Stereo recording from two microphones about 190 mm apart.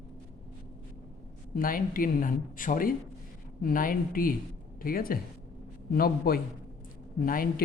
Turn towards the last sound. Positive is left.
turn(degrees=50)  # may be behind; listen again after turning